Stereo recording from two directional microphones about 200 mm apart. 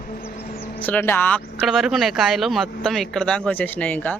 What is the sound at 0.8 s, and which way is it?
Speech, 10° left (ahead or behind).